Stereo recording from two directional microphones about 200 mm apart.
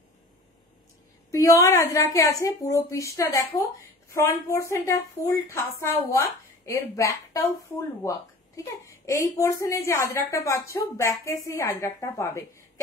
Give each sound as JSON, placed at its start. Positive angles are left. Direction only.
{"t": 1.3, "sound": "a woman's voice", "side_deg": 15}
{"t": 8.8, "sound": "a woman's voice", "side_deg": 15}